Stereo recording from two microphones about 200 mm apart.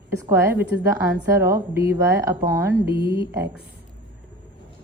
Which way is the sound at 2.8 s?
50° right (ahead or behind).